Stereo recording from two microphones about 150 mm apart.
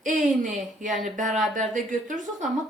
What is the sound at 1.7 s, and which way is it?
Speech, 60° right (ahead or behind).